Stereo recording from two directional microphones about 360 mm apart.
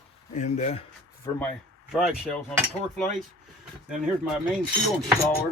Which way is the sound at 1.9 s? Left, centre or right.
Centre.